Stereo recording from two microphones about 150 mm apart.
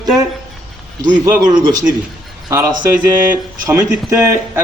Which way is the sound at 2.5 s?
20° right (ahead or behind).